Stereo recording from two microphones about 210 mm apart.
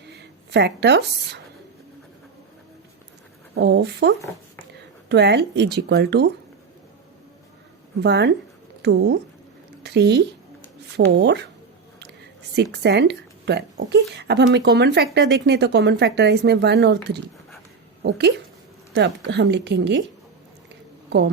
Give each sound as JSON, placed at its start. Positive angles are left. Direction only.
{"t": 0.1, "sound": "speech", "side_deg": -55}
{"t": 3.5, "sound": "speech", "side_deg": -55}
{"t": 8.0, "sound": "a woman's voice", "side_deg": -55}
{"t": 11.9, "sound": "a sound", "side_deg": -50}
{"t": 12.8, "sound": "speech", "side_deg": -55}